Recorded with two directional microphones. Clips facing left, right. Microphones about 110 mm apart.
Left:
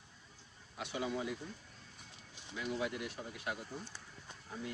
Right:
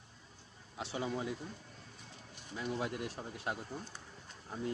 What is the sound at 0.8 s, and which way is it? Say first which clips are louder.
Speech: right 1 dB; 30° right (ahead or behind).